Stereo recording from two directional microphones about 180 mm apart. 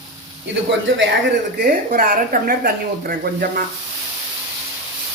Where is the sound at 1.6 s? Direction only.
55° right (ahead or behind).